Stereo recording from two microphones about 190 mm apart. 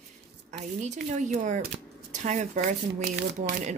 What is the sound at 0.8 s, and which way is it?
Speech, 40° right (ahead or behind).